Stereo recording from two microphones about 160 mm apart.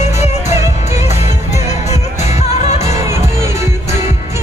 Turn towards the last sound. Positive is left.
turn(degrees=-15)  # may be behind; listen again after turning